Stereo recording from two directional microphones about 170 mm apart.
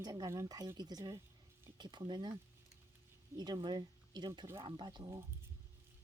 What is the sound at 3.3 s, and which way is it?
Speech, 25° right (ahead or behind).